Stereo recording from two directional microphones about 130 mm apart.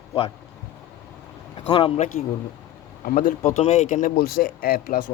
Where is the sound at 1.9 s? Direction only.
85° left.